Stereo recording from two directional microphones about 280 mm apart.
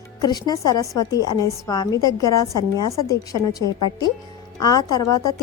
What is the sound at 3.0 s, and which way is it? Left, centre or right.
Speech, left.